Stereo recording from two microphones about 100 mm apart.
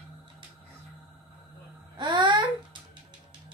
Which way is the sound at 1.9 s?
50° right (ahead or behind).